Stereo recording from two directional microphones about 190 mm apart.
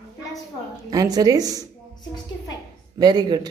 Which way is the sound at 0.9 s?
20° right (ahead or behind).